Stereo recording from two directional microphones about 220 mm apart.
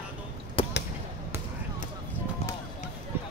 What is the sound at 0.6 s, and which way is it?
Basketball bounce, 25° left (ahead or behind).